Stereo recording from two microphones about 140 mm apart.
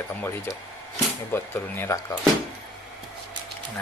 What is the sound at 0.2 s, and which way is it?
Speech, 15° left (ahead or behind).